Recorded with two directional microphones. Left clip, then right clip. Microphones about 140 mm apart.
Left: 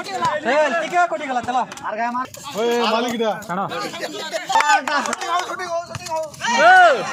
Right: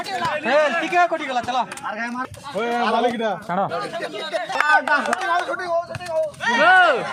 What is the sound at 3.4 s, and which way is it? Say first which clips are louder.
Speech: right 1 dB; 50° right (ahead or behind).